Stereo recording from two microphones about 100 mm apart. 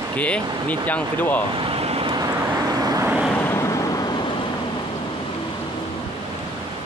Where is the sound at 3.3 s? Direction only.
20° left (ahead or behind).